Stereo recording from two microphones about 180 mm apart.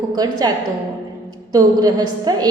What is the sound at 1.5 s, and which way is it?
Speech, 20° right (ahead or behind).